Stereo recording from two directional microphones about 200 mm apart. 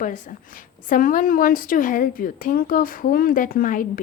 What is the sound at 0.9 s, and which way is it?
A woman's voice, 40° left (ahead or behind).